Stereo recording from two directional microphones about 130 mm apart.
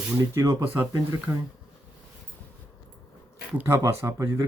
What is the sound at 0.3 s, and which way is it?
Speech, 25° right (ahead or behind).